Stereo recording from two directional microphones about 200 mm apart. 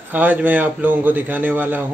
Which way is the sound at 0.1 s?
10° right (ahead or behind).